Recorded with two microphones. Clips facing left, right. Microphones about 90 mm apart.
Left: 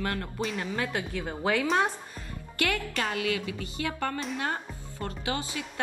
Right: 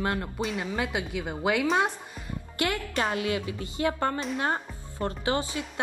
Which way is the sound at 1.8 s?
15° right (ahead or behind).